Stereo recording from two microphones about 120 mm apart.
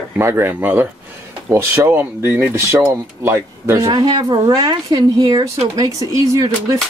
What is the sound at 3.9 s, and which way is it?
Speech, 35° right (ahead or behind).